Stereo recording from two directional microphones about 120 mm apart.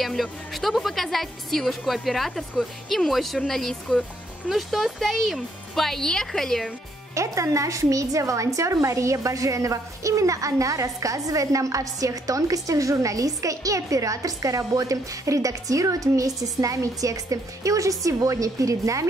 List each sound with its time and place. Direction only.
0.0 s speech: centre (ahead or behind)
7.2 s a woman's voice: 25° right (ahead or behind)